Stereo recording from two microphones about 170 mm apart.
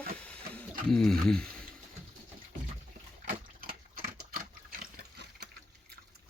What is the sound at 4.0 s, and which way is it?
Typewriter, 55° right (ahead or behind).